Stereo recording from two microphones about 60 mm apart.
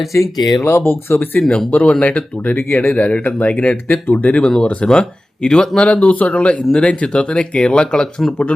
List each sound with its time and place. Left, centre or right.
0.1 s speech: left
0.6 s speech: left
1.4 s speech: centre
4.4 s speech: centre